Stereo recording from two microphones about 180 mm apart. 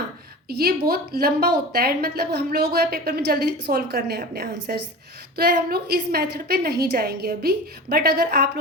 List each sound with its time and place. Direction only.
0.4 s a woman's voice: 60° right (ahead or behind)